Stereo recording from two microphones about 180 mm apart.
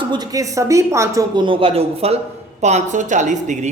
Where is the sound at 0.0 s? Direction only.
25° right (ahead or behind).